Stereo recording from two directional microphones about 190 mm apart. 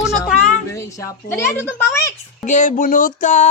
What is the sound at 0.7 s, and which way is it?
A child's voice, 15° left (ahead or behind).